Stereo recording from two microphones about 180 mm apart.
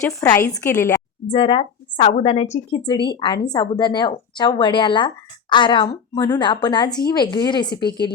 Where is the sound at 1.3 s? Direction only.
30° left (ahead or behind).